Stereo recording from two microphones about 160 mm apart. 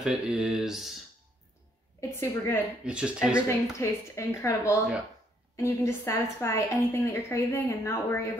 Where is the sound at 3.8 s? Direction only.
20° left (ahead or behind).